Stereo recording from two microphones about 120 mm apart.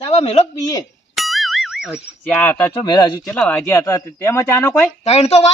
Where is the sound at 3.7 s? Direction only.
25° left (ahead or behind).